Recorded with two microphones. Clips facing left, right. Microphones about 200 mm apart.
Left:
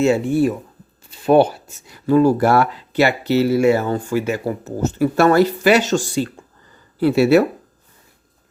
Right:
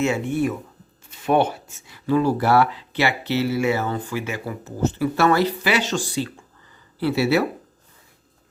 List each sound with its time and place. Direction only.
0.0 s speech: 35° left (ahead or behind); by 7.4 s 50° left (ahead or behind)